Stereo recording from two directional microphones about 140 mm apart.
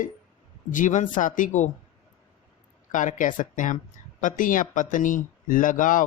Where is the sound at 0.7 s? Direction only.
65° left (ahead or behind).